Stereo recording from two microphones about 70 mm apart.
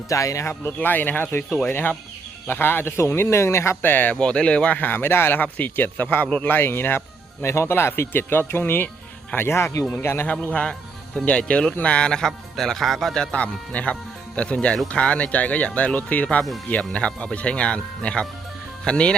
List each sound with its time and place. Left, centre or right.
0.1 s speech: left
0.8 s speech: left
3.8 s speech: left
4.2 s speech: centre; by 10.2 s left
10.5 s music: centre
11.3 s speech: centre